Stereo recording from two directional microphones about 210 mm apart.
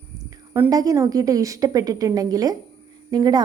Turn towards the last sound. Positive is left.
turn(degrees=-20)  # may be behind; listen again after turning